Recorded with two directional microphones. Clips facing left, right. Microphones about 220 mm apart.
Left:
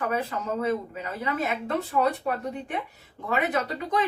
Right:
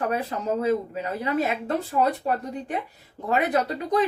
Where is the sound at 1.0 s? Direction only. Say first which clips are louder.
Right 4 dB; 35° right (ahead or behind).